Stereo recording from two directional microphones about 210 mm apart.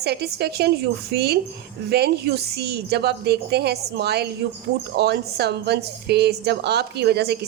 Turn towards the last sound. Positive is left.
turn(degrees=-50)  # may be behind; listen again after turning